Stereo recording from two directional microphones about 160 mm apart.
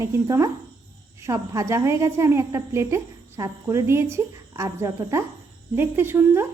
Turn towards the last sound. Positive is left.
turn(degrees=-15)  # may be behind; listen again after turning